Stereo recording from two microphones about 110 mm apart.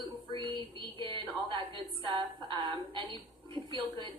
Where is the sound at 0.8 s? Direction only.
50° right (ahead or behind).